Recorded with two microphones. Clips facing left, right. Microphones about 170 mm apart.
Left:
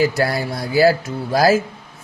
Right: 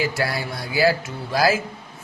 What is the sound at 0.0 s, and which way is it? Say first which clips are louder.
Speech: left 6 dB; 45° left (ahead or behind).